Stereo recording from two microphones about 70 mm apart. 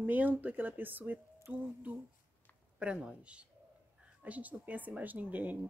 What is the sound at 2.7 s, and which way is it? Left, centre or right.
Speech, centre.